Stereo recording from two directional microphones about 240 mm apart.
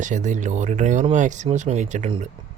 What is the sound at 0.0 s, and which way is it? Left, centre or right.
Speech, right.